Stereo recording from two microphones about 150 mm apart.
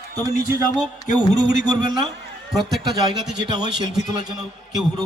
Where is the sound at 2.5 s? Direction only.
Centre (ahead or behind).